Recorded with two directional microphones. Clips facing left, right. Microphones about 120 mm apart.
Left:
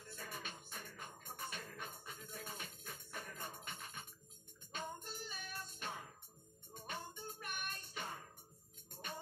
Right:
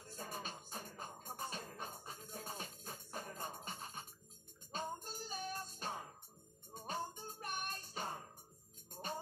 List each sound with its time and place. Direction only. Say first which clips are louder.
0.0 s music: right 3 dB; 35° right (ahead or behind)